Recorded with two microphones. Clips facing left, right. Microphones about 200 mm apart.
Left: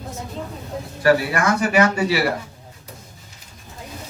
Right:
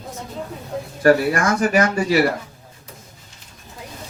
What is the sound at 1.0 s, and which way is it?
Speech, 45° right (ahead or behind).